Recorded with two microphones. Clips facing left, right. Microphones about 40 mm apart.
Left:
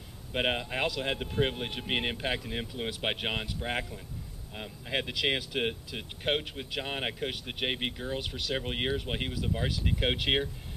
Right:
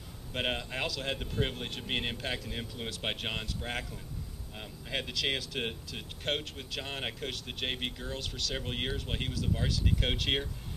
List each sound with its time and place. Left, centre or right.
0.3 s speech: centre